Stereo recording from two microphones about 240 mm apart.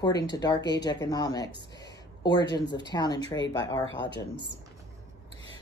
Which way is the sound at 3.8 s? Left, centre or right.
Left.